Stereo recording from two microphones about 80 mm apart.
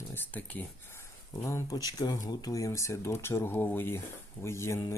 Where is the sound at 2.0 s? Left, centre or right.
Left.